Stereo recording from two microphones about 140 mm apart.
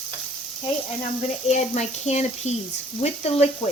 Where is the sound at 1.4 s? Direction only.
55° left (ahead or behind).